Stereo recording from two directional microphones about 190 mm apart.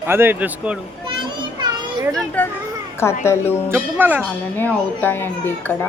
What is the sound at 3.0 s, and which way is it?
Speech, 15° left (ahead or behind).